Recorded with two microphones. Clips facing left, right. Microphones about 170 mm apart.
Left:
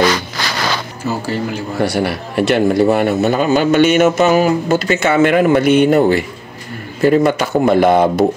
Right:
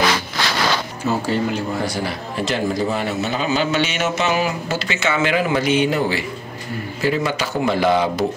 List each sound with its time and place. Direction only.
1.0 s speech: 5° left (ahead or behind)
1.8 s a man's voice: 65° left (ahead or behind)